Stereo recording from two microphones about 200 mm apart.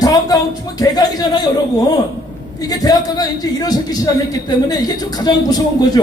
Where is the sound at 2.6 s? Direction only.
20° left (ahead or behind).